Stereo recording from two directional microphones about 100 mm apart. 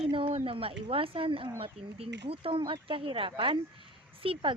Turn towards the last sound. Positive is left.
turn(degrees=-60)  # may be behind; listen again after turning